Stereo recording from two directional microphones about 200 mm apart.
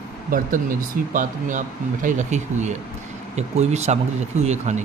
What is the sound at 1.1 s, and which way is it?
Speech, 40° right (ahead or behind).